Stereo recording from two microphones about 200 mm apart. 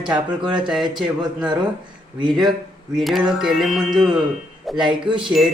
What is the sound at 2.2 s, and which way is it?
Speech, 25° right (ahead or behind).